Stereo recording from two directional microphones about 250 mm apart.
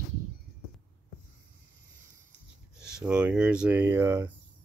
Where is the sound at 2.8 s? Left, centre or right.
Centre.